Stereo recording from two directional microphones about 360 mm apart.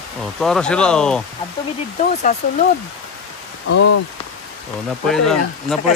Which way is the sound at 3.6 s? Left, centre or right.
Left.